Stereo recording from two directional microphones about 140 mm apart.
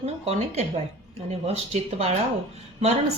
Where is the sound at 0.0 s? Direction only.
50° right (ahead or behind).